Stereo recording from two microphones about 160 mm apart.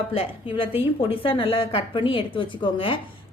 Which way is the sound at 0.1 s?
35° left (ahead or behind).